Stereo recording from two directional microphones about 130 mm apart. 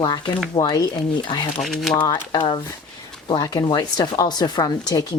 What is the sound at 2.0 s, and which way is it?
Speech, 35° left (ahead or behind).